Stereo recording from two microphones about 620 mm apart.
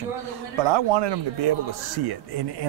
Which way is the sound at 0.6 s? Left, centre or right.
Right.